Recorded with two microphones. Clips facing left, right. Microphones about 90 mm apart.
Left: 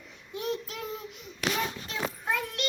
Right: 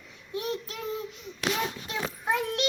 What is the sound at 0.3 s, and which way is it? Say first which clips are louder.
Child singing: right 1 dB; centre (ahead or behind).